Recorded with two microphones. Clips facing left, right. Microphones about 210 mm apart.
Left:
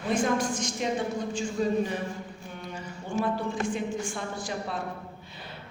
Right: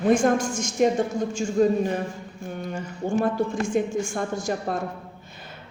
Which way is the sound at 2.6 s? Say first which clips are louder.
Right 9 dB; 45° right (ahead or behind).